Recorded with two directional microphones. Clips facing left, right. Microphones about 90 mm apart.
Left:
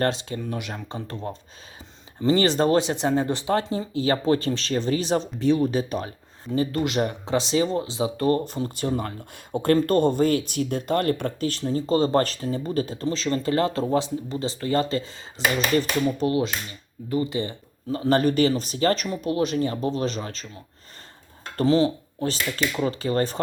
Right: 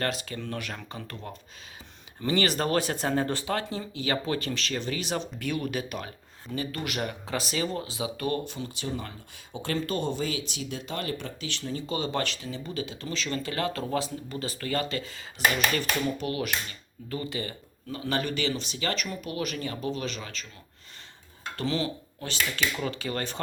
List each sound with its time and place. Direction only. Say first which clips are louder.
0.0 s speech: left 6 dB; 30° left (ahead or behind)
0.3 s speech: left 4 dB; 15° left (ahead or behind); by 8.4 s 30° left (ahead or behind)
8.4 s speech: left 8 dB; 45° left (ahead or behind)
21.5 s speech: left 10 dB; 35° left (ahead or behind)